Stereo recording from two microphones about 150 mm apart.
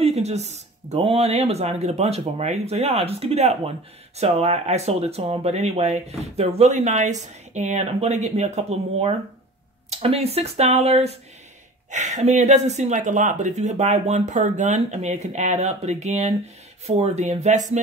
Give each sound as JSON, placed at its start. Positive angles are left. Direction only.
{"t": 0.0, "sound": "speech", "side_deg": -45}